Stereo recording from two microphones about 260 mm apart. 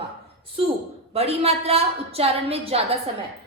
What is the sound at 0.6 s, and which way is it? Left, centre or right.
A woman's voice, right.